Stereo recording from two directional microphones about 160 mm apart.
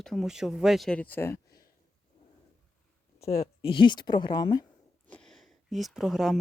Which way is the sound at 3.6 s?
30° left (ahead or behind).